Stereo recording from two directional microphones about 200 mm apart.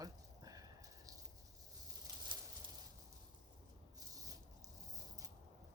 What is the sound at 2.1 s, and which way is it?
Bird, 15° right (ahead or behind).